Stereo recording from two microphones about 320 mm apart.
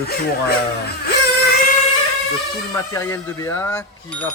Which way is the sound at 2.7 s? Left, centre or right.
Centre.